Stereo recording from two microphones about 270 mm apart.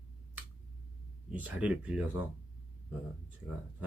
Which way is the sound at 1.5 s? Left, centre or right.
Centre.